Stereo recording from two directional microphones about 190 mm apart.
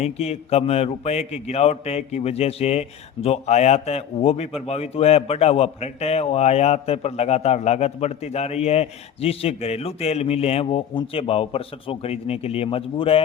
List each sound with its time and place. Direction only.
0.0 s a man's voice: 35° left (ahead or behind)